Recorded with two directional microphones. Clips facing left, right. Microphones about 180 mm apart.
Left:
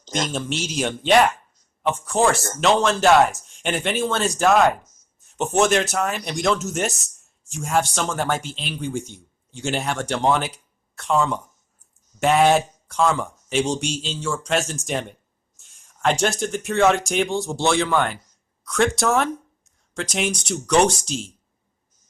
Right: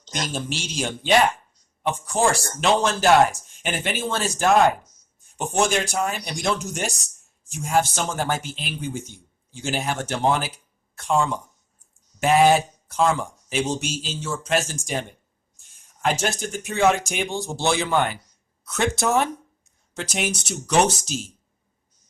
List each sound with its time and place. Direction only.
0.1 s a man's voice: centre (ahead or behind)
14.1 s speech: 40° right (ahead or behind)
14.4 s a man's voice: centre (ahead or behind)